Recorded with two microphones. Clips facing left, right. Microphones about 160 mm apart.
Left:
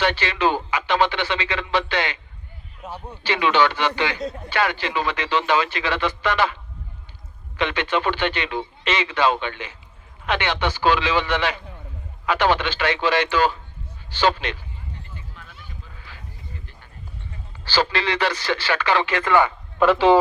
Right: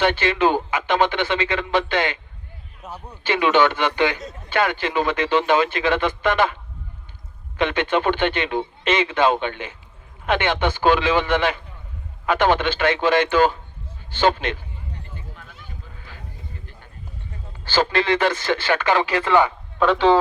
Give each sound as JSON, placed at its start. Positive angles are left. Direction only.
{"t": 0.0, "sound": "a man's voice", "side_deg": -50}
{"t": 3.2, "sound": "a man's voice", "side_deg": -50}
{"t": 7.5, "sound": "a man's voice", "side_deg": -50}
{"t": 16.0, "sound": "a sound", "side_deg": -45}
{"t": 17.7, "sound": "a man's voice", "side_deg": -50}
{"t": 19.8, "sound": "speech", "side_deg": 5}